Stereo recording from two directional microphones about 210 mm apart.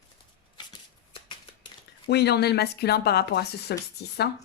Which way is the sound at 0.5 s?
20° left (ahead or behind).